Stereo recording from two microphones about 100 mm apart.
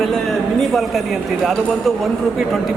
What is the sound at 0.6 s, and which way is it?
Speech, centre (ahead or behind).